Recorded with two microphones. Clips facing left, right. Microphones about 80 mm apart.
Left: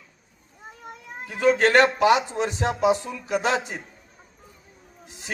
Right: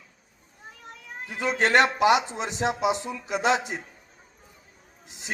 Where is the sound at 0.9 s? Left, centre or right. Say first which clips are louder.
Left 2 dB; centre.